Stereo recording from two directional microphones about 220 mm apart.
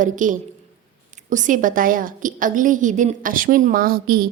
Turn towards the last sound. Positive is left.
turn(degrees=-40)  # may be behind; listen again after turning